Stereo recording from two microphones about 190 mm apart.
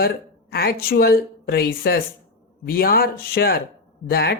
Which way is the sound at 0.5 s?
55° left (ahead or behind).